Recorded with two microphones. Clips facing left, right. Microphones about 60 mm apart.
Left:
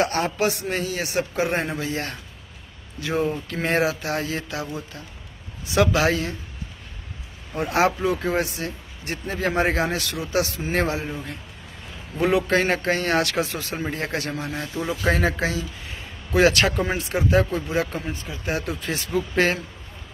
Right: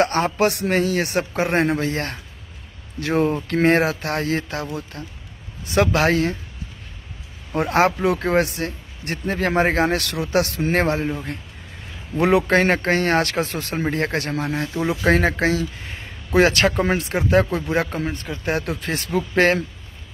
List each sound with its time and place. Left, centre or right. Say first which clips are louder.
0.0 s speech: right 4 dB; right
0.5 s speech: right 6 dB; right
7.7 s speech: right 2 dB; right
9.8 s speech: right 5 dB; right
12.2 s speech: right 3 dB; right